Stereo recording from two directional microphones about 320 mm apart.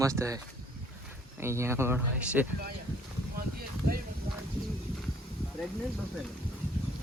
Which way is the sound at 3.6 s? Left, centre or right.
Right.